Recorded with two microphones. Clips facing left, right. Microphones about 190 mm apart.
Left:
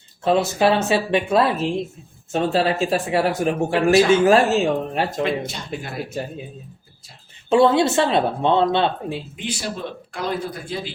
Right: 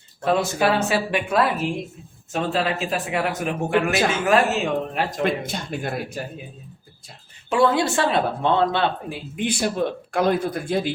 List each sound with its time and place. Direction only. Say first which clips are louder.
0.3 s speech: left 3 dB; 25° left (ahead or behind)
5.2 s speech: even; 50° right (ahead or behind)
6.2 s speech: left 3 dB; 25° left (ahead or behind)
7.5 s speech: left 4 dB; 25° left (ahead or behind)
9.3 s speech: right 5 dB; 55° right (ahead or behind)